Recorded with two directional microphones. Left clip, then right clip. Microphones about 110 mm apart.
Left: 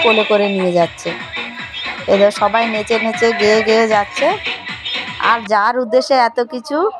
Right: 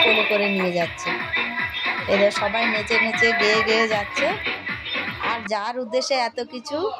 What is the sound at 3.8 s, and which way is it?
Speech, 55° left (ahead or behind).